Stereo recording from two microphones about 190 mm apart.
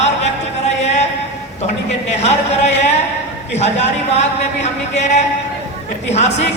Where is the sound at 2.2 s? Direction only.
35° left (ahead or behind).